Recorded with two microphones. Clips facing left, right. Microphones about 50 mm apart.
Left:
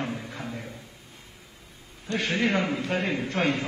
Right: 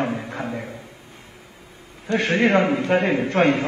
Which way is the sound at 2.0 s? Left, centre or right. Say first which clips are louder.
Right 7 dB; centre.